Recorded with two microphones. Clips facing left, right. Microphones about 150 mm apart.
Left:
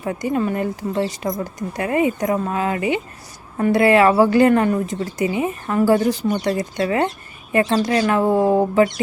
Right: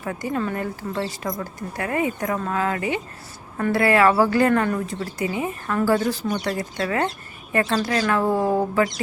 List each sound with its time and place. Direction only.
0.0 s speech: 20° left (ahead or behind)